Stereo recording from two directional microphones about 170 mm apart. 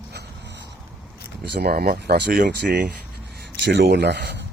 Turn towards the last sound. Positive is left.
turn(degrees=-80)